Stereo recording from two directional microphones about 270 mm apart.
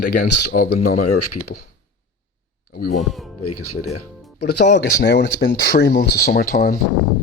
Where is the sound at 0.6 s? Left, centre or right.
Left.